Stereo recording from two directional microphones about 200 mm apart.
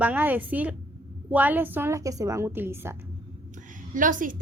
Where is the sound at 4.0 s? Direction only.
40° right (ahead or behind).